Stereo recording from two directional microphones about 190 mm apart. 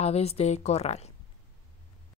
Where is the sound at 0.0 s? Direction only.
35° left (ahead or behind).